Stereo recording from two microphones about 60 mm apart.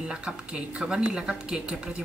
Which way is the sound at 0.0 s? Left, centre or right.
Centre.